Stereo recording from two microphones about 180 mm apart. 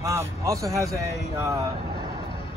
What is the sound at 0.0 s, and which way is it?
Speech, 15° right (ahead or behind).